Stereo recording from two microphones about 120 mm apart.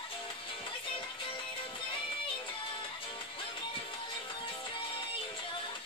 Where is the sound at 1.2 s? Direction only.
45° left (ahead or behind).